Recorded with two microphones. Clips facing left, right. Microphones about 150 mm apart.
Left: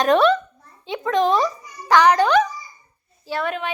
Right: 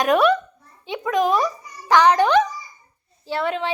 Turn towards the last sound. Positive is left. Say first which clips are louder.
# right 1 dB
turn(degrees=-25)  # may be behind; listen again after turning